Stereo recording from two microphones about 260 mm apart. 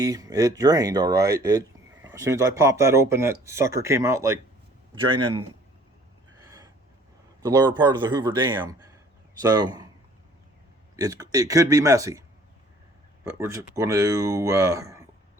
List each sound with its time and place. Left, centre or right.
0.0 s speech: centre
7.4 s speech: centre
10.9 s speech: centre
13.4 s speech: centre